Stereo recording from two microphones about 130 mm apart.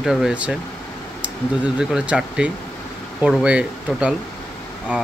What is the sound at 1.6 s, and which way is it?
Speech, 5° right (ahead or behind).